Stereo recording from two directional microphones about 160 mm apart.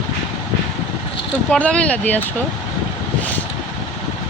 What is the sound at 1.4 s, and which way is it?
Speech, 10° left (ahead or behind).